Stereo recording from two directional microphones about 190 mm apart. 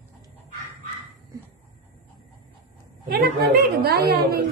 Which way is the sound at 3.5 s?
55° right (ahead or behind).